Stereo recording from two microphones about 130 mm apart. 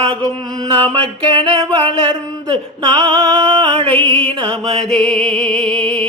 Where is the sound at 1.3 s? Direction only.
40° right (ahead or behind).